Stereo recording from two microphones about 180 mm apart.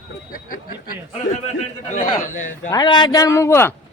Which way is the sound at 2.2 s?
45° left (ahead or behind).